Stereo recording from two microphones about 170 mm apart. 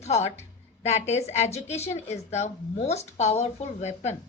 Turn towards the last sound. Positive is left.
turn(degrees=40)  # may be behind; listen again after turning